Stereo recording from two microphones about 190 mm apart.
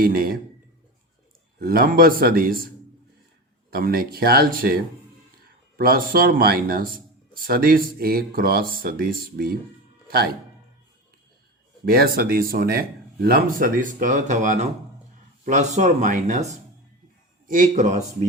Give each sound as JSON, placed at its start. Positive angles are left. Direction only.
{"t": 0.0, "sound": "a man's voice", "side_deg": -50}
{"t": 1.5, "sound": "a man's voice", "side_deg": -50}
{"t": 11.9, "sound": "a man's voice", "side_deg": -50}